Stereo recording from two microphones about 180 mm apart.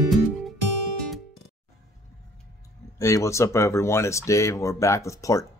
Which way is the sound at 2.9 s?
15° left (ahead or behind).